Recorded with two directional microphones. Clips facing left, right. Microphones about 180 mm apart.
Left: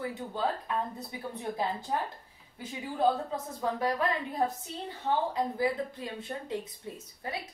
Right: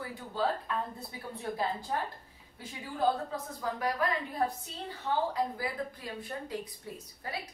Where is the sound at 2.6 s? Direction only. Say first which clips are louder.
Left 3 dB; 20° left (ahead or behind).